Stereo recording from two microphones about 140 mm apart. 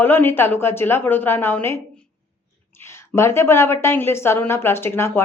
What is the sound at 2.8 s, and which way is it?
A woman's voice, 20° left (ahead or behind).